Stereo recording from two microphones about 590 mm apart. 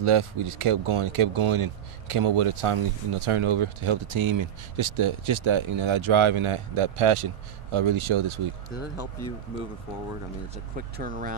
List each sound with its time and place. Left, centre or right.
0.0 s speech: right
10.5 s speech: centre